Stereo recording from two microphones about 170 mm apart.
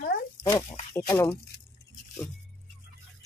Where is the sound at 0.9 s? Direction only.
15° left (ahead or behind).